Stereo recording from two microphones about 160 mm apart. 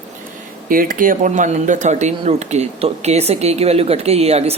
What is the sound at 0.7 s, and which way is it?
Speech, 60° right (ahead or behind).